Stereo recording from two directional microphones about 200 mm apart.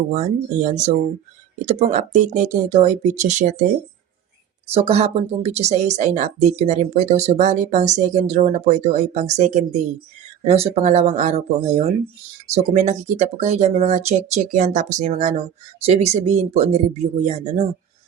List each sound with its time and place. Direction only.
0.1 s a woman's voice: 35° right (ahead or behind)
4.7 s a woman's voice: 30° right (ahead or behind)